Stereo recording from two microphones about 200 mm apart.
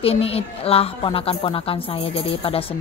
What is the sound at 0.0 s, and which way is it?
Speech, 30° left (ahead or behind).